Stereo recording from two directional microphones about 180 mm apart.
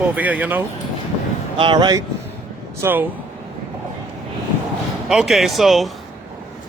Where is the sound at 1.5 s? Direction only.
25° right (ahead or behind).